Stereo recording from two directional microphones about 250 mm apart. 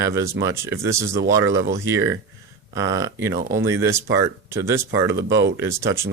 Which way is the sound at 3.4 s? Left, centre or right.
Right.